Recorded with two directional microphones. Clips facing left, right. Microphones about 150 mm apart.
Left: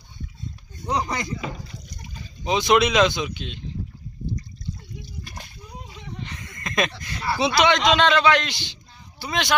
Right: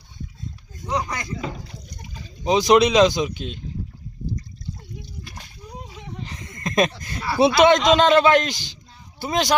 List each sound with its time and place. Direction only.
0.9 s speech: 25° left (ahead or behind)
2.4 s speech: 40° right (ahead or behind)
6.2 s a sound: 35° right (ahead or behind)
7.3 s a man's voice: 55° right (ahead or behind)